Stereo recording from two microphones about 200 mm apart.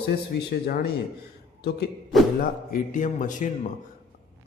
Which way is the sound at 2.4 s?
45° left (ahead or behind).